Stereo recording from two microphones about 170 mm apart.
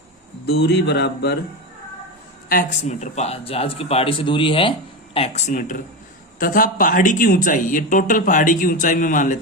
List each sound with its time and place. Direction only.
0.4 s speech: 70° left (ahead or behind)
2.5 s speech: 50° left (ahead or behind)